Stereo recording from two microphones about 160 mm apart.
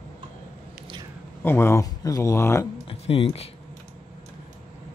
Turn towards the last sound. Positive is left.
turn(degrees=40)  # may be behind; listen again after turning